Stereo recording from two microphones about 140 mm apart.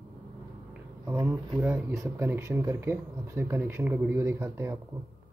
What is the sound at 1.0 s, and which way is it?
Speech, 15° right (ahead or behind).